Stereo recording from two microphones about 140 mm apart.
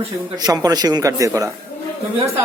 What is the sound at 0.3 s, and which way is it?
Speech, 25° right (ahead or behind).